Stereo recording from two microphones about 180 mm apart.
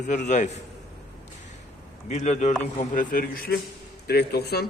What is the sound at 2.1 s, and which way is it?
A man's voice, 40° left (ahead or behind).